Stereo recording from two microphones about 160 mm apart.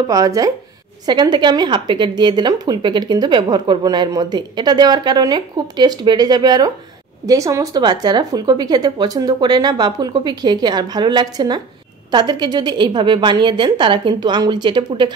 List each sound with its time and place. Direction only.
0.1 s a woman's voice: 20° right (ahead or behind)